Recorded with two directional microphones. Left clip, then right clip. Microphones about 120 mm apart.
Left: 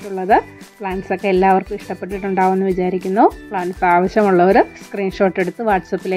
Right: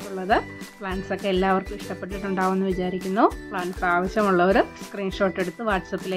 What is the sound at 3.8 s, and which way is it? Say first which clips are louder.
Speech: left 9 dB; 40° left (ahead or behind).